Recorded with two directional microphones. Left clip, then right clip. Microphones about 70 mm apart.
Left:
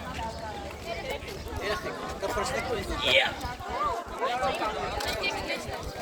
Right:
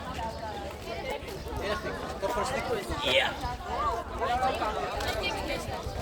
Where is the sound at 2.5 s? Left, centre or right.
Centre.